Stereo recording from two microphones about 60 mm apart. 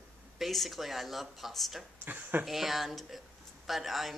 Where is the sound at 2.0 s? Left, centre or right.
Right.